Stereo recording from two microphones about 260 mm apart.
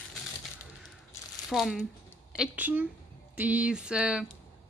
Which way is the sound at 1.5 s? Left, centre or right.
Centre.